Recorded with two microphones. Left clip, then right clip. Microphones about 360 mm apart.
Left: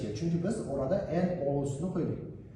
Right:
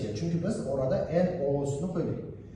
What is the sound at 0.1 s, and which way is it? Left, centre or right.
A man's voice, centre.